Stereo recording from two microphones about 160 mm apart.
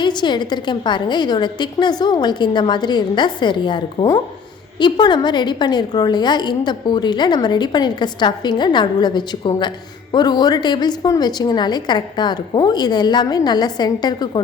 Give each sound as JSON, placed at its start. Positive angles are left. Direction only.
{"t": 0.0, "sound": "a woman's voice", "side_deg": 30}